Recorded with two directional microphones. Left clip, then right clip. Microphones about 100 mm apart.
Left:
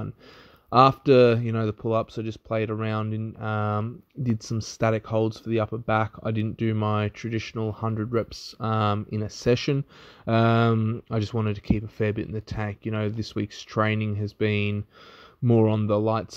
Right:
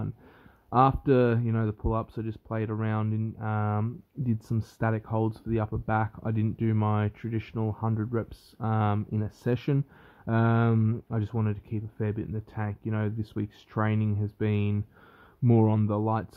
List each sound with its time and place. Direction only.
0.7 s speech: 30° left (ahead or behind)
15.5 s speech: 15° left (ahead or behind)